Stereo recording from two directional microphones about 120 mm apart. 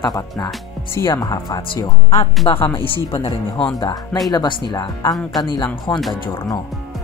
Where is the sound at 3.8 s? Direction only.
35° left (ahead or behind).